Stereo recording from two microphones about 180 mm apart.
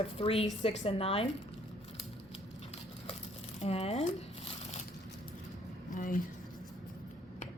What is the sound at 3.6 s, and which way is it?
Speech, 35° left (ahead or behind).